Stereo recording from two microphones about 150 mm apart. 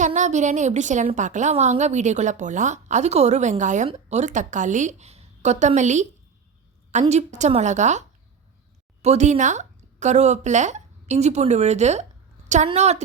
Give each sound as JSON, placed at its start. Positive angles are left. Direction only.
{"t": 0.0, "sound": "a woman's voice", "side_deg": -50}
{"t": 7.1, "sound": "a woman's voice", "side_deg": -50}